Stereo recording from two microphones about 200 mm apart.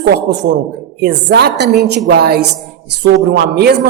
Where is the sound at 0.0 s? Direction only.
55° right (ahead or behind).